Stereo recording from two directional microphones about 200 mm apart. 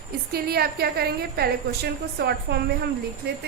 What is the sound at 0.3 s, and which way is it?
A woman's voice, 50° right (ahead or behind).